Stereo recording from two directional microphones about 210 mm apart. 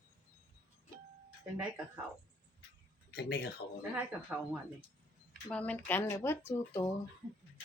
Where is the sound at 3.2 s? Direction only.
50° left (ahead or behind).